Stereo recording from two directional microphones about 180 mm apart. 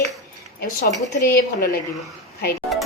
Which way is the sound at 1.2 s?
55° left (ahead or behind).